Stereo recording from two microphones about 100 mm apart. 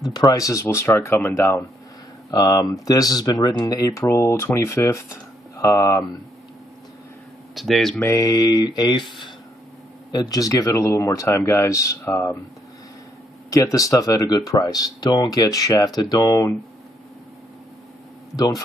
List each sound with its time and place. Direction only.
0.1 s speech: 40° left (ahead or behind); by 1.6 s 25° left (ahead or behind)
2.3 s speech: 40° left (ahead or behind)
7.5 s speech: centre (ahead or behind)
8.0 s speech: 30° left (ahead or behind); by 9.0 s 50° left (ahead or behind)
10.1 s speech: 40° left (ahead or behind); by 12.4 s 25° left (ahead or behind)
13.5 s speech: 35° left (ahead or behind)
18.3 s speech: 40° left (ahead or behind)